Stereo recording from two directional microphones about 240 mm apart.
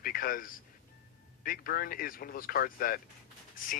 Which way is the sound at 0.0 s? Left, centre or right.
Left.